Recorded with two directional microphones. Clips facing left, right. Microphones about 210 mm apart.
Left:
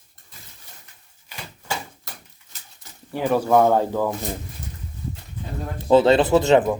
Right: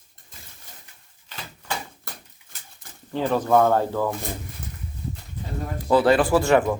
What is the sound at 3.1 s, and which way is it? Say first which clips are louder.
Speech: left 1 dB; 10° left (ahead or behind).